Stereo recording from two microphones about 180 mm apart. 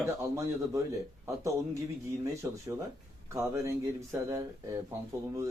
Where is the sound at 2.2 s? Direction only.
15° right (ahead or behind).